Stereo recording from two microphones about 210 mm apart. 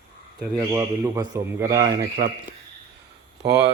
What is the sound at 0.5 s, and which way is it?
A man's voice, 10° right (ahead or behind).